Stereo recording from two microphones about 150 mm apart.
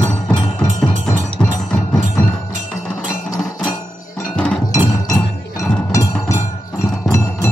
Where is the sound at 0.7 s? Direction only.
55° right (ahead or behind).